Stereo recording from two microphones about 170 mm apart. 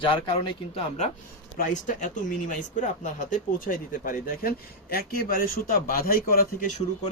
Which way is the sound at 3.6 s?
55° left (ahead or behind).